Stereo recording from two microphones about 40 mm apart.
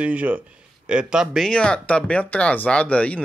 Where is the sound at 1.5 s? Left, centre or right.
Left.